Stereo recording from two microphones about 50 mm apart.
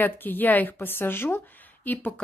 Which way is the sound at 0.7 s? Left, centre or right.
Left.